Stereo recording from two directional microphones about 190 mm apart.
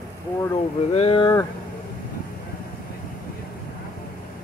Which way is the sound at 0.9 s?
30° left (ahead or behind).